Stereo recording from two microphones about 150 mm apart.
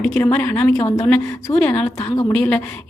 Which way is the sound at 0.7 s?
20° left (ahead or behind).